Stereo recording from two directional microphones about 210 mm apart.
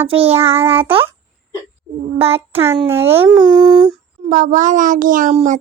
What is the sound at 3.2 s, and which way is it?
Speech, 20° right (ahead or behind).